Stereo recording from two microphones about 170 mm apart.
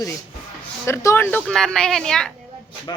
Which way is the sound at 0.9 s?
15° left (ahead or behind).